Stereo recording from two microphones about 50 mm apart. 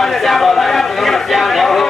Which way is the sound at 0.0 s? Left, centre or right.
Centre.